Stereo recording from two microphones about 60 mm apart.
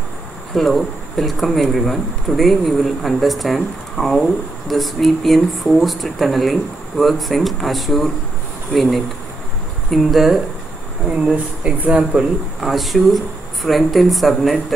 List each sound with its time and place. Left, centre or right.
0.6 s speech: centre
11.1 s speech: centre
12.5 s speech: centre